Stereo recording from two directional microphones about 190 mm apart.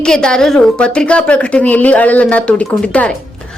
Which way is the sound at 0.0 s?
5° left (ahead or behind).